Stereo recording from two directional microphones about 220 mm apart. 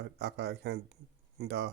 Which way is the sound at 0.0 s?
50° right (ahead or behind).